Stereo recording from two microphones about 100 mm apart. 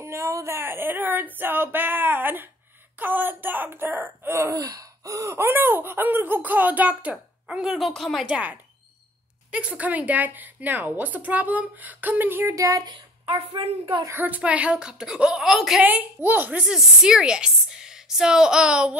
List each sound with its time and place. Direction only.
0.0 s speech: 30° right (ahead or behind)
4.6 s laughter: 35° right (ahead or behind); by 8.3 s centre (ahead or behind)
8.3 s laughter: 15° right (ahead or behind)
12.5 s speech: 35° right (ahead or behind)
13.5 s a woman's voice: 65° right (ahead or behind)
14.1 s laughter: 15° right (ahead or behind)
15.8 s laughter: 20° right (ahead or behind)